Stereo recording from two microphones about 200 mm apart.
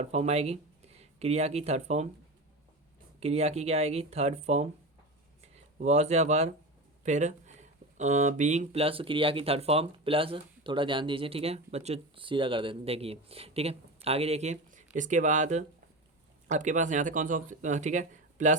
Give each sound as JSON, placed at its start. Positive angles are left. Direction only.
{"t": 0.0, "sound": "speech", "side_deg": -30}
{"t": 3.2, "sound": "speech", "side_deg": -30}